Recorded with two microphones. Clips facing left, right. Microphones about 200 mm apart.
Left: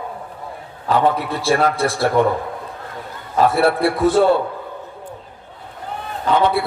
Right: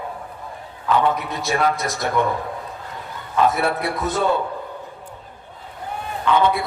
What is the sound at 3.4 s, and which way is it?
Speech, 30° left (ahead or behind).